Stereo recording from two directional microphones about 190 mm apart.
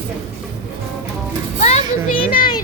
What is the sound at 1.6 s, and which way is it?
Children playing, 35° left (ahead or behind).